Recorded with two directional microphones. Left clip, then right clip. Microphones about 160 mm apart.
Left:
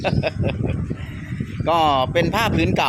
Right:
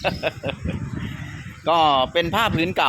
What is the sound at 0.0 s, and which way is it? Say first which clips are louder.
Speech: left 1 dB; 10° left (ahead or behind).